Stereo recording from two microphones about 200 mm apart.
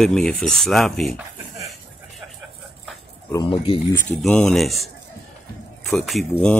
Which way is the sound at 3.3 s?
20° left (ahead or behind).